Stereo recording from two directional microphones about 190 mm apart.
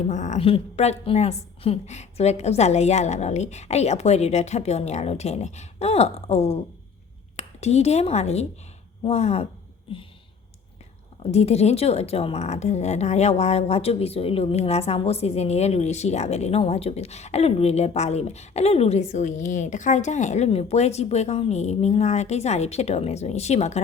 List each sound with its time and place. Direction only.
0.0 s a woman's voice: 40° left (ahead or behind)
11.2 s a woman's voice: 35° left (ahead or behind)